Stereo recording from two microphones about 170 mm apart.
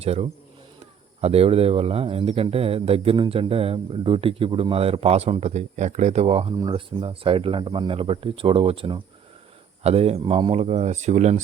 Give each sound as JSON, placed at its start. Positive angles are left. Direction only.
{"t": 0.0, "sound": "speech", "side_deg": -35}
{"t": 6.6, "sound": "speech", "side_deg": -25}